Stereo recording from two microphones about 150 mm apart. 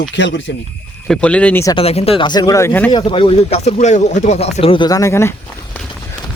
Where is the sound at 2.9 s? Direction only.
30° left (ahead or behind).